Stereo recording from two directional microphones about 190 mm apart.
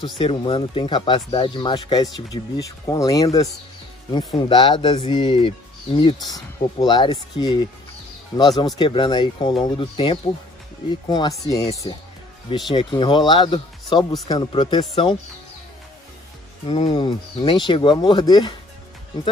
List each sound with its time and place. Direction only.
0.2 s speech: 30° left (ahead or behind)
12.7 s speech: 25° left (ahead or behind)
16.6 s speech: 30° left (ahead or behind)